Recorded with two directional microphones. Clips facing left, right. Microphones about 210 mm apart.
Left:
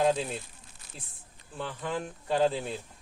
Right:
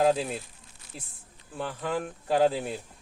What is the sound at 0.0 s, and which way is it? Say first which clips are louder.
Speech: right 2 dB; 5° right (ahead or behind).